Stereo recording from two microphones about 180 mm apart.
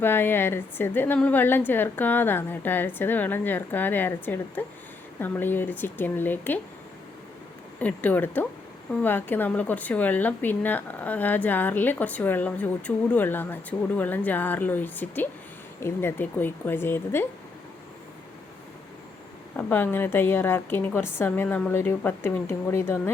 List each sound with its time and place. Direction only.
0.0 s a woman's voice: 10° left (ahead or behind)
7.8 s a woman's voice: 10° left (ahead or behind)
19.5 s a woman's voice: 10° left (ahead or behind)